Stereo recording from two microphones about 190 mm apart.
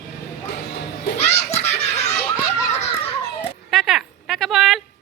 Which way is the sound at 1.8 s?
35° left (ahead or behind).